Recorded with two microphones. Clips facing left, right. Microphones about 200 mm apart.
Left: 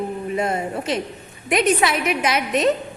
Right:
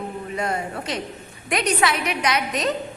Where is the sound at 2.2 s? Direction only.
25° left (ahead or behind).